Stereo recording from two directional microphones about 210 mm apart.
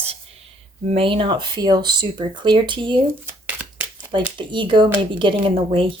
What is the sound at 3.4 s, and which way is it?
Shuffling cards, 5° right (ahead or behind).